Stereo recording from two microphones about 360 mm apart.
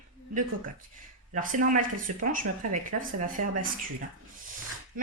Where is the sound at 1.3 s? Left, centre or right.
Right.